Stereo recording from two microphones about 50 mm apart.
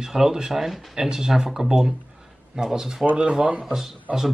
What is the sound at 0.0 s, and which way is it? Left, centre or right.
Speech, centre.